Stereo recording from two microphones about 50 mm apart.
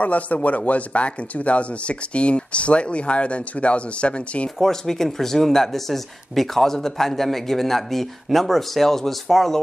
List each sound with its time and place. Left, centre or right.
0.0 s speech: left
4.6 s speech: centre